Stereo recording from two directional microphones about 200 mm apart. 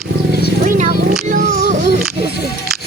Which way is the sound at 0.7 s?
40° right (ahead or behind).